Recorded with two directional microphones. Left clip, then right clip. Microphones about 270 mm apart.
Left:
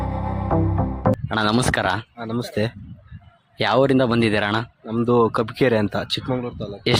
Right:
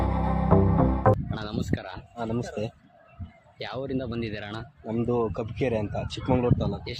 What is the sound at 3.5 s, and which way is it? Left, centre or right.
Speech, left.